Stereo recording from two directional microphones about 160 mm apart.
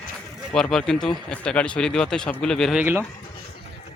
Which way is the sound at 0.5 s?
5° left (ahead or behind).